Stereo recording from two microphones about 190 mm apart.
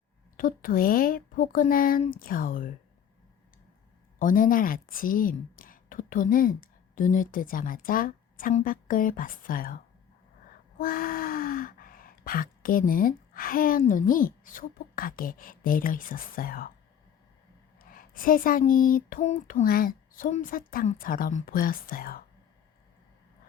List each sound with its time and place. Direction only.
0.3 s speech: 50° left (ahead or behind)
4.2 s a woman's voice: 45° left (ahead or behind)
10.8 s gasp: 50° left (ahead or behind)
17.7 s speech: 50° left (ahead or behind)